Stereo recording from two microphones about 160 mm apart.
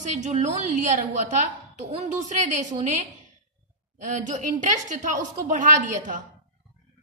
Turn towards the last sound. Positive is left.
turn(degrees=-55)  # may be behind; listen again after turning